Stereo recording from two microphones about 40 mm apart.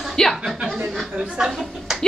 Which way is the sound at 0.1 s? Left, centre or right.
Centre.